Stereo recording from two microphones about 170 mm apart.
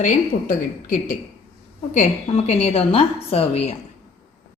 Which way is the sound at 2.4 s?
35° left (ahead or behind).